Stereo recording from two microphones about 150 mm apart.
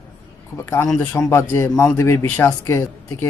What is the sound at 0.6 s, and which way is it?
Speech, 15° left (ahead or behind).